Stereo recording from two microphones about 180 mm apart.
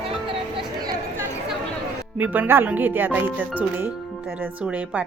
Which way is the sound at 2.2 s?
10° right (ahead or behind).